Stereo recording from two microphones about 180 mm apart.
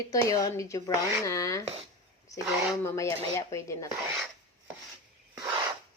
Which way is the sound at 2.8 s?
15° left (ahead or behind).